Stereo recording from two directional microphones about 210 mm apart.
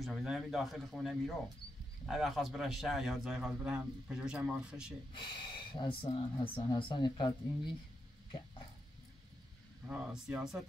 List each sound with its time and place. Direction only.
0.0 s a man's voice: centre (ahead or behind)
5.1 s speech: 25° left (ahead or behind)
9.8 s a man's voice: 5° right (ahead or behind)